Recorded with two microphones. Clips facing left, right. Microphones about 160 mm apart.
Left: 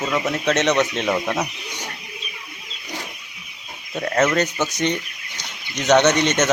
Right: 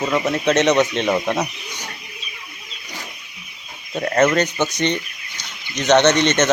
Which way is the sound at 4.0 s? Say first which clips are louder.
Right 2 dB; 5° right (ahead or behind).